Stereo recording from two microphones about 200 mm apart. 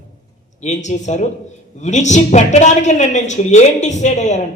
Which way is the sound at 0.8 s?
35° left (ahead or behind).